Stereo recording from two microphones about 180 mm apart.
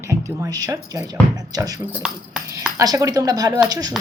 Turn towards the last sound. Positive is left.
turn(degrees=-20)  # may be behind; listen again after turning